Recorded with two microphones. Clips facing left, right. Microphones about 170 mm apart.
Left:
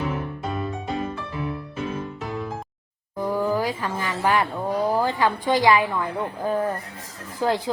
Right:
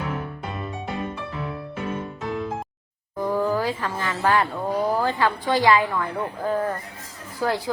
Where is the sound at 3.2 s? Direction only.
10° left (ahead or behind).